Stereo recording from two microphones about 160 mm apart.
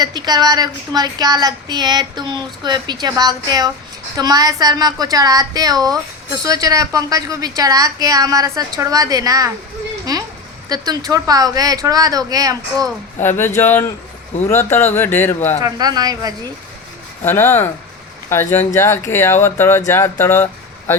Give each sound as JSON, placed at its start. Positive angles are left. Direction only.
{"t": 0.0, "sound": "speech", "side_deg": -25}
{"t": 10.7, "sound": "speech", "side_deg": -25}
{"t": 13.2, "sound": "speech", "side_deg": 15}
{"t": 15.6, "sound": "speech", "side_deg": -25}
{"t": 17.2, "sound": "speech", "side_deg": 15}